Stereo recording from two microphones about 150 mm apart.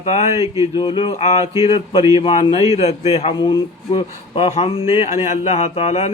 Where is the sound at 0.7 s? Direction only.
35° left (ahead or behind).